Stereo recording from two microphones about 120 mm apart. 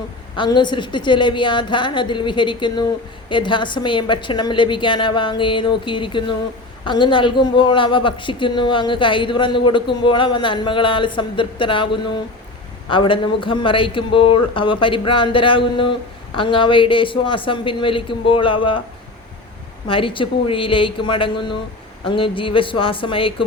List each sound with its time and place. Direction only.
0.3 s a woman's voice: 40° left (ahead or behind)
19.9 s a woman's voice: 45° left (ahead or behind)